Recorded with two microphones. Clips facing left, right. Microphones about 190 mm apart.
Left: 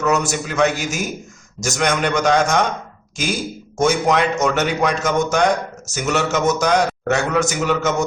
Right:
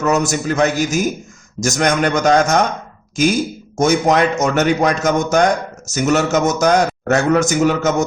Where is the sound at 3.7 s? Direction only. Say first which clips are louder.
Right 3 dB; 45° right (ahead or behind).